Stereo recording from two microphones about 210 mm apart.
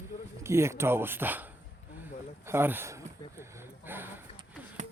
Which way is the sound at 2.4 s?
10° right (ahead or behind).